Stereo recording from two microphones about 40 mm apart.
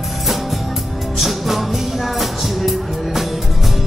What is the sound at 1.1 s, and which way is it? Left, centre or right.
Music, centre.